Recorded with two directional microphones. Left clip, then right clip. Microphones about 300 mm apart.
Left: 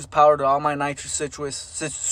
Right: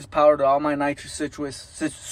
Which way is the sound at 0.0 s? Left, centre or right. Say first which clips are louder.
Left 1 dB; centre.